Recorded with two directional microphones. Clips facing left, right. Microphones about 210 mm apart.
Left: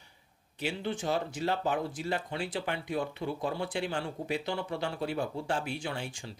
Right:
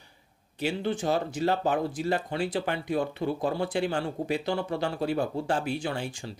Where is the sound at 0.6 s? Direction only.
40° right (ahead or behind).